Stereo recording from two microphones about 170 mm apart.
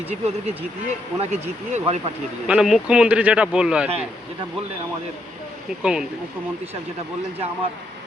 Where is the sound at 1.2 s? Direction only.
40° right (ahead or behind).